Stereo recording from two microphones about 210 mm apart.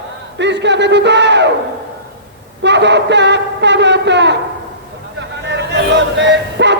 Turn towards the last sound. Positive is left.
turn(degrees=-55)  # may be behind; listen again after turning